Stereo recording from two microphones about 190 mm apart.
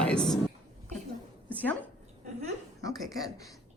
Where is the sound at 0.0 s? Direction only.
5° left (ahead or behind).